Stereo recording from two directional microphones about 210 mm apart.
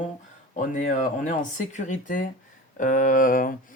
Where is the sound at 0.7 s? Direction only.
35° left (ahead or behind).